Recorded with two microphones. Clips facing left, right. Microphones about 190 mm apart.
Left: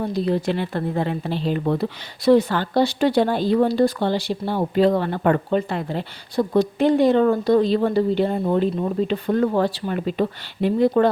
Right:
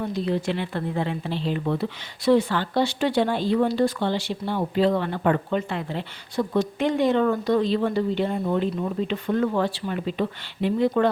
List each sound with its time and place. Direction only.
0.0 s speech: 35° left (ahead or behind)